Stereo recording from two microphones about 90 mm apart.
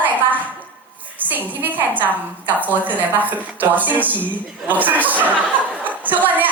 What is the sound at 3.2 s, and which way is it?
Speech, 20° right (ahead or behind).